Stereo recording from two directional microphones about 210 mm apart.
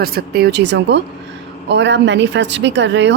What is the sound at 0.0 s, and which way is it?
Speech, 45° right (ahead or behind).